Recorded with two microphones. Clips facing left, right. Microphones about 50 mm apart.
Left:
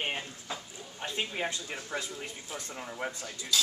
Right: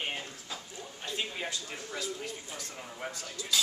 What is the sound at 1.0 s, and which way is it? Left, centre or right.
Speech, left.